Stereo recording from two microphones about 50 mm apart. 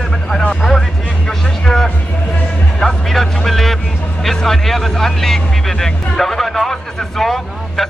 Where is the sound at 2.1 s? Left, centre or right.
Left.